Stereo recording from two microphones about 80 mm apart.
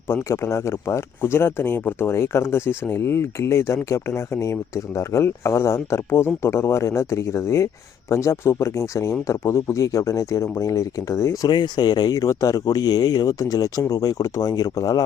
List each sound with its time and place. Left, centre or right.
0.1 s speech: left
11.4 s speech: left